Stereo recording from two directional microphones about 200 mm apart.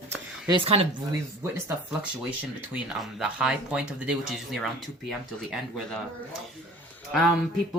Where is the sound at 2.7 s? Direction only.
5° right (ahead or behind).